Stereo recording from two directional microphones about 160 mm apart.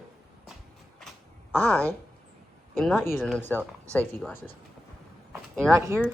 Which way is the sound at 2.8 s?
5° left (ahead or behind).